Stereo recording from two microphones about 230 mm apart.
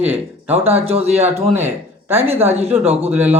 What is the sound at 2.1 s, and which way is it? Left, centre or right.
Speech, centre.